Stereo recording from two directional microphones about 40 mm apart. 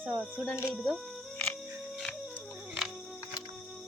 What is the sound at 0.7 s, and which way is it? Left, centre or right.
Speech, centre.